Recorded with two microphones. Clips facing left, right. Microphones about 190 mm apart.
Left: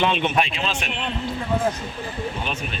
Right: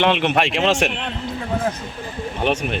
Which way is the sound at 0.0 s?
70° right (ahead or behind).